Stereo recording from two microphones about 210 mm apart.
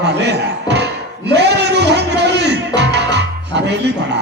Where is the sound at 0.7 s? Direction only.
55° right (ahead or behind).